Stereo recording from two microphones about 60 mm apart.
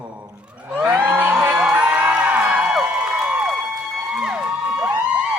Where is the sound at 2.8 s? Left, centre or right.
Centre.